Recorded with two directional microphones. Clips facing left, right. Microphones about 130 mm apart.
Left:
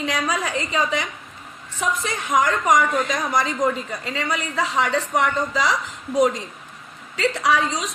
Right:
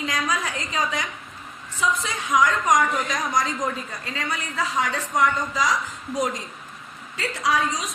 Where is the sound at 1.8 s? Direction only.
55° left (ahead or behind).